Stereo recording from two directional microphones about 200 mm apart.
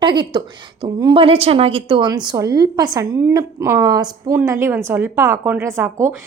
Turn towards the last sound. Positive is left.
turn(degrees=-15)  # may be behind; listen again after turning